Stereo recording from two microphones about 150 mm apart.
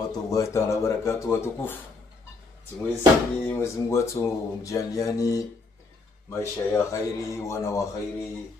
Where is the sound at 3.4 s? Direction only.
20° left (ahead or behind).